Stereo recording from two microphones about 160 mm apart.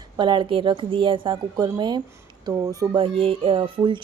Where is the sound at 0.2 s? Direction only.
30° right (ahead or behind).